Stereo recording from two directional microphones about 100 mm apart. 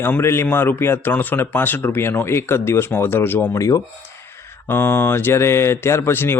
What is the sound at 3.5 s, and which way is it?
Speech, 35° left (ahead or behind).